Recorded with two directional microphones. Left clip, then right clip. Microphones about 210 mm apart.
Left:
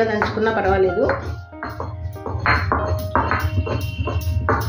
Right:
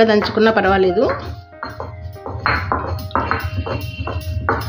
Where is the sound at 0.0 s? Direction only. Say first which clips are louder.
Right 6 dB; 50° right (ahead or behind).